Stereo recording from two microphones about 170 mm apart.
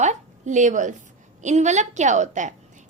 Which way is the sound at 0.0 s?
45° right (ahead or behind).